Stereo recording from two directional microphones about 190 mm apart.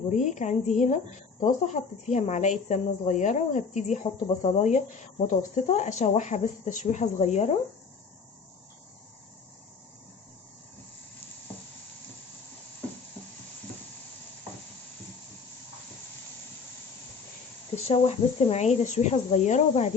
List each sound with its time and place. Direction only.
0.1 s speech: 40° left (ahead or behind)
17.8 s speech: 30° left (ahead or behind)